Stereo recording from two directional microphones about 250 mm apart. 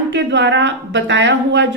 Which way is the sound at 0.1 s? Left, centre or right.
Right.